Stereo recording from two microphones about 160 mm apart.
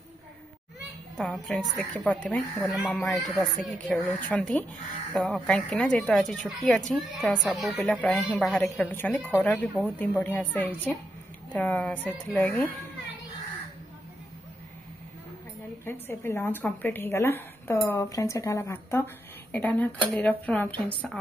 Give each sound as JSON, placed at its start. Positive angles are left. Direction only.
{"t": 1.1, "sound": "a woman's voice", "side_deg": 5}
{"t": 15.8, "sound": "speech", "side_deg": 15}